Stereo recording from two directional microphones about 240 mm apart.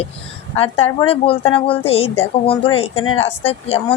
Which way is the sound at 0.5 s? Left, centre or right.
Left.